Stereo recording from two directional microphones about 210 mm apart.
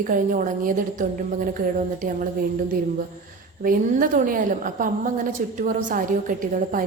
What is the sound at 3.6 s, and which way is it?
A woman's voice, 40° right (ahead or behind).